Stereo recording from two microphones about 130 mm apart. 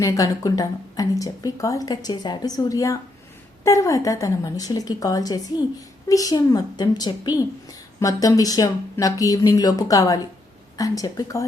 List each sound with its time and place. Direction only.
0.0 s speech: 25° left (ahead or behind)